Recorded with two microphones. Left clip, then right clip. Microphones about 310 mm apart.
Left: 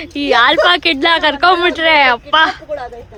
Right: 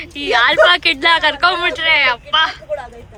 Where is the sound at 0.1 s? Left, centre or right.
Centre.